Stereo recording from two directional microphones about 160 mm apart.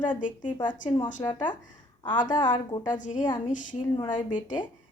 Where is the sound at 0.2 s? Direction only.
55° left (ahead or behind).